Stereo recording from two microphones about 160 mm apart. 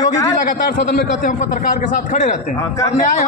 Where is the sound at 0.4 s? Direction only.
60° left (ahead or behind).